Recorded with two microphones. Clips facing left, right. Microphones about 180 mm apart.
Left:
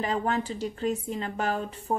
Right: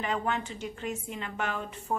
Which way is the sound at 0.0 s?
35° left (ahead or behind).